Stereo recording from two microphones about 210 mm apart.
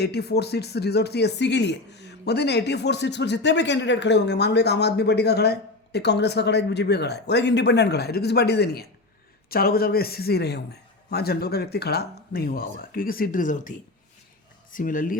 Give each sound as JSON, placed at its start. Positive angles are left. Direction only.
{"t": 0.0, "sound": "speech", "side_deg": 50}